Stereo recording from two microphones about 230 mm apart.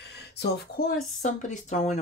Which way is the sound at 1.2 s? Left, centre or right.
Left.